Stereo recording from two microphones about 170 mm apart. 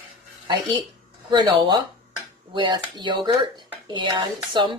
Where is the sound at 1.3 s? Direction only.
25° right (ahead or behind).